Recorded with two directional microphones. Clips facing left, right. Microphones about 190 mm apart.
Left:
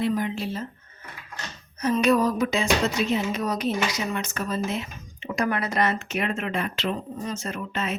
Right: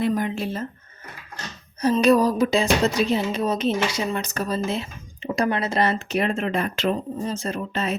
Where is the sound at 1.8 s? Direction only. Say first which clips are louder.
Right 3 dB; 35° right (ahead or behind).